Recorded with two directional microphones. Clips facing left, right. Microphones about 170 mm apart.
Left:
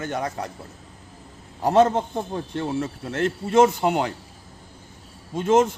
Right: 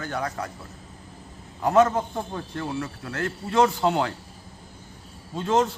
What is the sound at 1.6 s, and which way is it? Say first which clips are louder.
Speech: left 2 dB; 30° left (ahead or behind).